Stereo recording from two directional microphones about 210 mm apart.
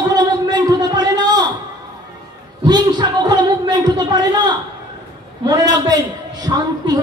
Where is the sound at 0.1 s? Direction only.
20° right (ahead or behind).